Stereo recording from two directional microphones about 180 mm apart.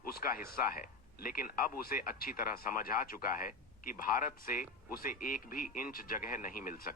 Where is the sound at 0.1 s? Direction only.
55° left (ahead or behind).